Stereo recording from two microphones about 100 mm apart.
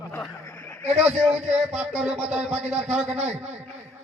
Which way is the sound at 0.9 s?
90° right.